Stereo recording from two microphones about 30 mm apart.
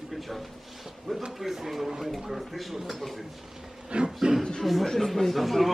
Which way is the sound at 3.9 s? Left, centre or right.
Right.